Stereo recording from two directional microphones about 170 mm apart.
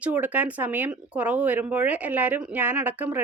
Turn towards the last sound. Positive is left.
turn(degrees=-10)  # may be behind; listen again after turning